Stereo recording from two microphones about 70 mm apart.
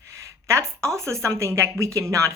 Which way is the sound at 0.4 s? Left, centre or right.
Right.